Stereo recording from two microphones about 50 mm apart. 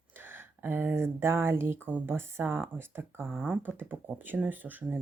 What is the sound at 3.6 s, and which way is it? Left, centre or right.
Speech, right.